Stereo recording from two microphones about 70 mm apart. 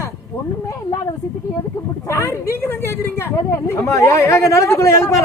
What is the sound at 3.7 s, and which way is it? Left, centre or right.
Speech, left.